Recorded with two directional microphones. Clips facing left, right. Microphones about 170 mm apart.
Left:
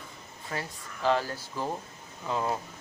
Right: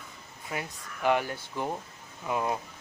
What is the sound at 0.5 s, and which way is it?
Speech, 15° right (ahead or behind).